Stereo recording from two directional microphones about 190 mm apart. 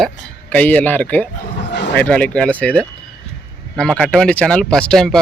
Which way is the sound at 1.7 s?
65° left (ahead or behind).